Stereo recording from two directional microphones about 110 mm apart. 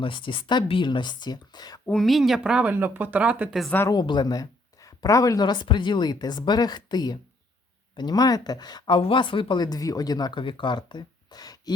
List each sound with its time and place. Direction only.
0.0 s speech: 50° left (ahead or behind)
1.9 s speech: centre (ahead or behind)
3.8 s speech: 40° left (ahead or behind)
9.0 s speech: 55° left (ahead or behind); by 11.7 s 35° left (ahead or behind)